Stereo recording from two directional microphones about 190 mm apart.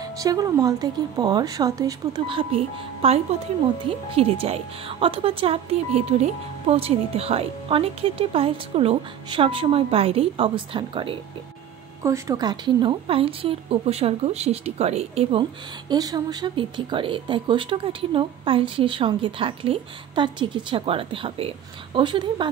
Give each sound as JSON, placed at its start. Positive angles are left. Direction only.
{"t": 0.0, "sound": "speech", "side_deg": -20}
{"t": 12.0, "sound": "speech", "side_deg": -15}
{"t": 15.9, "sound": "speech", "side_deg": -20}